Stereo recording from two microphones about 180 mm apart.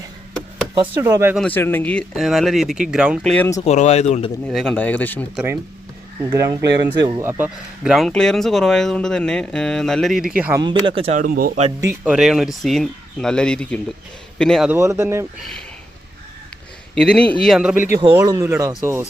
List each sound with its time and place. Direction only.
0.9 s a man's voice: 15° right (ahead or behind)
1.4 s speech: 10° left (ahead or behind)
3.3 s speech: 15° left (ahead or behind)
3.6 s speech: 40° left (ahead or behind)
4.4 s speech: centre (ahead or behind)
6.3 s speech: 20° right (ahead or behind)
10.6 s speech: 25° right (ahead or behind)
11.2 s speech: 50° right (ahead or behind)
11.8 s speech: 10° right (ahead or behind)
14.7 s a man's voice: 15° right (ahead or behind)
16.9 s speech: 5° left (ahead or behind)
18.1 s a man's voice: 20° right (ahead or behind)